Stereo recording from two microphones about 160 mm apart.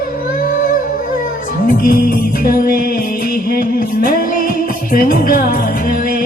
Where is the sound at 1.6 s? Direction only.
65° left (ahead or behind).